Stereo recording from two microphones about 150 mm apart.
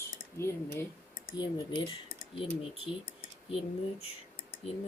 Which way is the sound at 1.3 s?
30° left (ahead or behind).